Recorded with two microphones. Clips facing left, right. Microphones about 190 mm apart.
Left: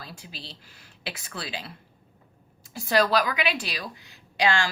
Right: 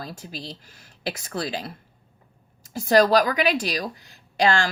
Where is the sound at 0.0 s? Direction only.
45° right (ahead or behind).